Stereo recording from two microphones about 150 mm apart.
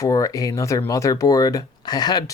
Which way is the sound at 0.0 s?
25° left (ahead or behind).